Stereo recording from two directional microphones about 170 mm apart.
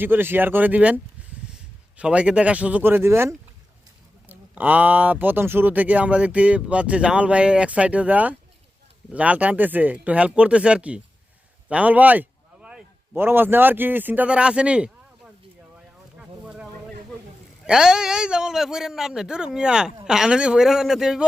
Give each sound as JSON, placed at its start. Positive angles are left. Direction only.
{"t": 0.0, "sound": "speech", "side_deg": -10}
{"t": 2.0, "sound": "a man's voice", "side_deg": -5}
{"t": 16.1, "sound": "a sound", "side_deg": -5}
{"t": 17.7, "sound": "a man's voice", "side_deg": -5}